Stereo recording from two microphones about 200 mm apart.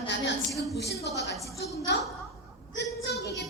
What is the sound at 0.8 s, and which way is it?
Speech, 55° left (ahead or behind).